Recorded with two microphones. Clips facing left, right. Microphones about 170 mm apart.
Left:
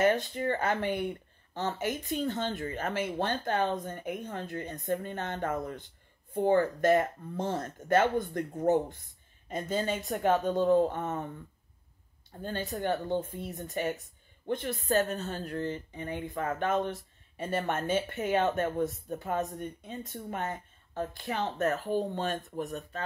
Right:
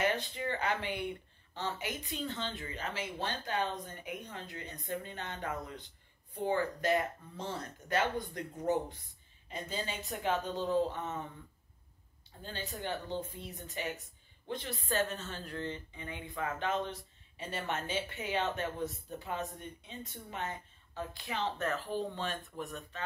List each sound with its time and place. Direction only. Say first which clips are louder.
0.0 s speech: left 7 dB; 45° left (ahead or behind)
12.4 s speech: left 8 dB; 50° left (ahead or behind)